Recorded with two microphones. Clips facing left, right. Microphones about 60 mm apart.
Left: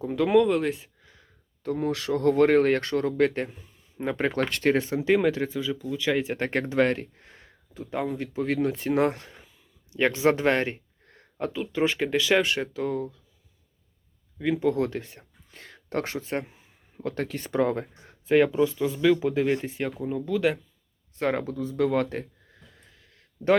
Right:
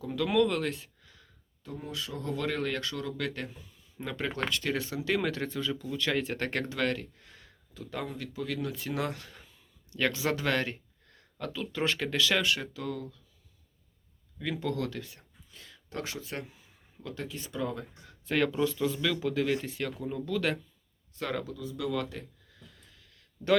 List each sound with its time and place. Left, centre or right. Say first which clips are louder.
0.0 s speech: left 6 dB; left
1.6 s speech: left 12 dB; left
9.3 s a sound: left 2 dB; centre
10.0 s speech: left 8 dB; left
14.3 s speech: left 9 dB; centre
15.4 s a sound: left 8 dB; left
17.0 s speech: left 9 dB; left
18.0 s speech: left 8 dB; left
21.2 s a sound: left 8 dB; left